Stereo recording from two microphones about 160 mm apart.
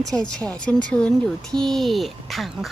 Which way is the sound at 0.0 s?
5° left (ahead or behind).